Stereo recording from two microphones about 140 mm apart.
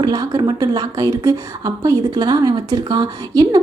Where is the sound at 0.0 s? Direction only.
25° right (ahead or behind).